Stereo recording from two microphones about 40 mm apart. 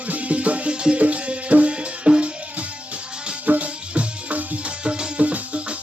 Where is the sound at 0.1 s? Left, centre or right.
Right.